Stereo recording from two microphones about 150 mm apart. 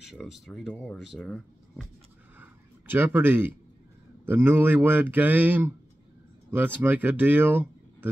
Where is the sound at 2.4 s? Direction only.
15° right (ahead or behind).